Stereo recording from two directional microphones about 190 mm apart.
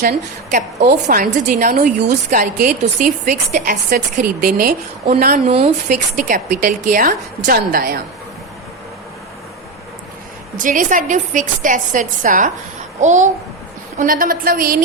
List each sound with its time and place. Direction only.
0.0 s a woman's voice: 50° right (ahead or behind)
1.0 s a woman's voice: 45° right (ahead or behind)
2.0 s a woman's voice: 55° right (ahead or behind)
2.4 s a woman's voice: 40° right (ahead or behind)
5.5 s a woman's voice: 30° right (ahead or behind)
6.1 s a woman's voice: 45° right (ahead or behind)
10.6 s a woman's voice: 45° right (ahead or behind)